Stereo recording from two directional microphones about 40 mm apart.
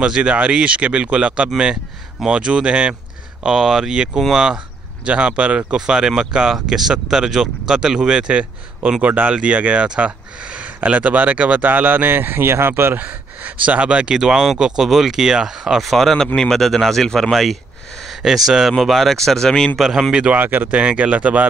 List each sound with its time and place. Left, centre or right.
0.0 s speech: centre
3.4 s speech: centre; by 8.9 s right
9.0 s speech: right
11.6 s speech: right
12.9 s speech: right
14.1 s speech: centre
15.8 s speech: centre
19.1 s speech: centre
19.8 s speech: centre
20.1 s speech: right
20.3 s speech: right
20.6 s speech: right